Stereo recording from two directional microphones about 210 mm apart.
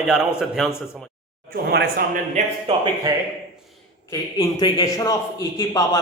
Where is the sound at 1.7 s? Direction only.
45° right (ahead or behind).